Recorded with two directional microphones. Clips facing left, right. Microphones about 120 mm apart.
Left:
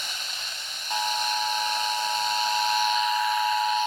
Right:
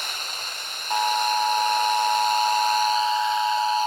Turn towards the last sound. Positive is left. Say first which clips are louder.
# right 2 dB
turn(degrees=-30)  # may be behind; listen again after turning